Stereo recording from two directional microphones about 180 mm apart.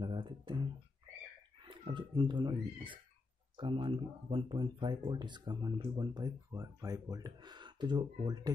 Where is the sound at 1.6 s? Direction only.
30° right (ahead or behind).